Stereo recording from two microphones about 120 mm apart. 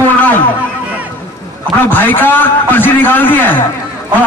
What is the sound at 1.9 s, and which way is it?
A man's voice, 15° left (ahead or behind).